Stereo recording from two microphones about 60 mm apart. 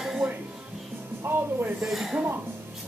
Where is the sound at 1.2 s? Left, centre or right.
Right.